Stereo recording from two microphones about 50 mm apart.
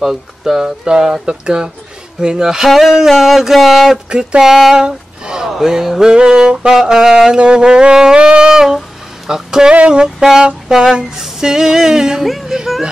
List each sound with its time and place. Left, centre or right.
0.0 s a sound: centre
0.7 s speech: centre
2.7 s a sound: centre
4.1 s speech: centre
7.3 s speech: centre
12.3 s speech: centre